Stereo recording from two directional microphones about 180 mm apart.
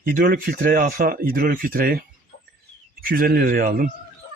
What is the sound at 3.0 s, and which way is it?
Speech, 55° right (ahead or behind).